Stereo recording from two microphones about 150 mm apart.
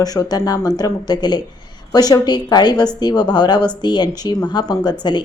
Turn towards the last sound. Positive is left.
turn(degrees=30)  # may be behind; listen again after turning